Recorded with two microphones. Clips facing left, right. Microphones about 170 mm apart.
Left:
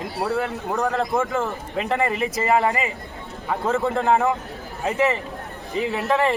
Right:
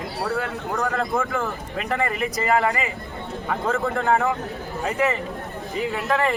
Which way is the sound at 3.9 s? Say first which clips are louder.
Left 2 dB; 20° left (ahead or behind).